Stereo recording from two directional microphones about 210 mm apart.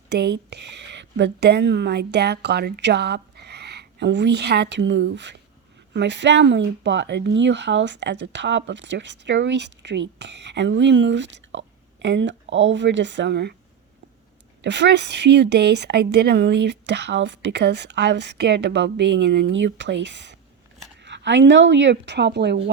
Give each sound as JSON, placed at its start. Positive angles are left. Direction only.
{"t": 0.1, "sound": "a woman's voice", "side_deg": -50}
{"t": 14.6, "sound": "speech", "side_deg": -55}